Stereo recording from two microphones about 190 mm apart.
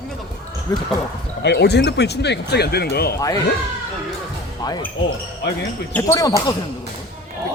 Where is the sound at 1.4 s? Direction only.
60° left (ahead or behind).